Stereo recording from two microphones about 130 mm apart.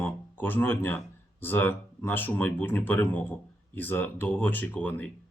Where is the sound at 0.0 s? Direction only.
15° left (ahead or behind).